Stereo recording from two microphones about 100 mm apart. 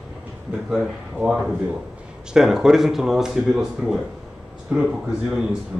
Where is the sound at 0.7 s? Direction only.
5° right (ahead or behind).